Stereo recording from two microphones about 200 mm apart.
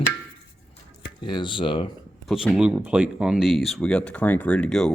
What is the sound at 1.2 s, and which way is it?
Speech, 25° left (ahead or behind).